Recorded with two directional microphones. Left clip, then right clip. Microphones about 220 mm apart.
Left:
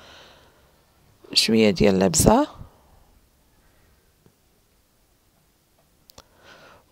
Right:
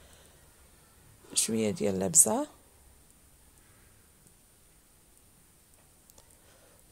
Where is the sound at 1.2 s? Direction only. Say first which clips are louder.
Left 13 dB; 25° left (ahead or behind).